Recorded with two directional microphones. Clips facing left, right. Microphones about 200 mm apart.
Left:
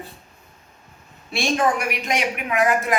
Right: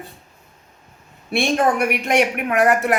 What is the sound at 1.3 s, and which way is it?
Speech, 60° right (ahead or behind).